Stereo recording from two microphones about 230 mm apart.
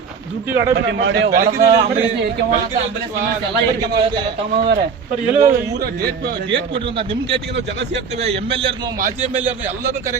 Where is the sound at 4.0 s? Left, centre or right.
Right.